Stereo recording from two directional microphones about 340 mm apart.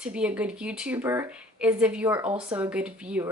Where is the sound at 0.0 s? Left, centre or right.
Centre.